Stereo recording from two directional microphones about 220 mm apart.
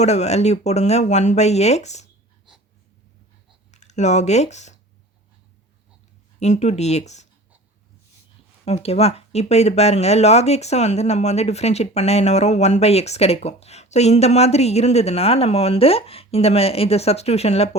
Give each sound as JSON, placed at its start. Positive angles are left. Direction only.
{"t": 0.0, "sound": "speech", "side_deg": 30}
{"t": 3.7, "sound": "speech", "side_deg": 30}
{"t": 6.4, "sound": "speech", "side_deg": 30}
{"t": 8.6, "sound": "speech", "side_deg": 30}